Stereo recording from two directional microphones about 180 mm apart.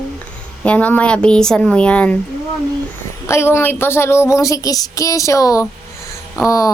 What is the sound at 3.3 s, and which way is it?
Speech, 15° left (ahead or behind).